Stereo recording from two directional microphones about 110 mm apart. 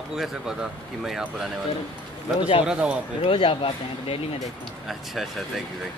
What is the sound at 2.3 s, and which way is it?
Speech, 55° left (ahead or behind).